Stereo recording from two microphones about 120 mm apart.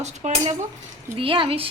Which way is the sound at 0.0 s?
70° right (ahead or behind).